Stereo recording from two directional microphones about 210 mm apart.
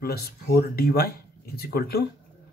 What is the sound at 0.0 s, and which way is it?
Speech, 45° left (ahead or behind).